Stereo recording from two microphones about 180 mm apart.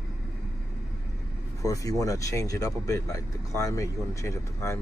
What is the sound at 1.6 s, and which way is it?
Speech, 20° left (ahead or behind).